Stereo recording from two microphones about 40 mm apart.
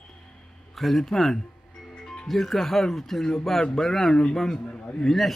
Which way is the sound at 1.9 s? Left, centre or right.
Centre.